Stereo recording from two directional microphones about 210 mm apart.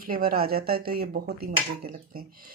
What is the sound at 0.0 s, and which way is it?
Speech, 45° right (ahead or behind).